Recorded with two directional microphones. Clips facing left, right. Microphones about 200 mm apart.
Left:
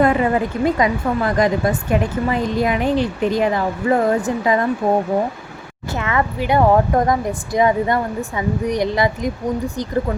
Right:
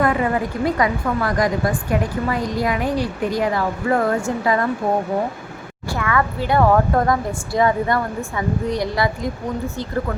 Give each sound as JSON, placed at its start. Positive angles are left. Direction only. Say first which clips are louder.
{"t": 0.0, "sound": "a woman's voice", "louder": "left 3 dB", "side_deg": 25}
{"t": 5.9, "sound": "a woman's voice", "louder": "even", "side_deg": 20}